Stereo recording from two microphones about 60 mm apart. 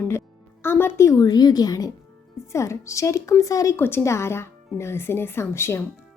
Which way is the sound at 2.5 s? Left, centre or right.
Left.